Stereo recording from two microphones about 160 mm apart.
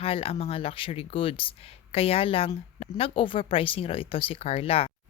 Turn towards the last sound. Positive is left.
turn(degrees=35)  # may be behind; listen again after turning